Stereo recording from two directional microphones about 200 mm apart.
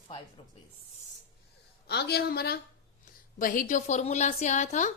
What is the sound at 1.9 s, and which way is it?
A woman's voice, 55° left (ahead or behind).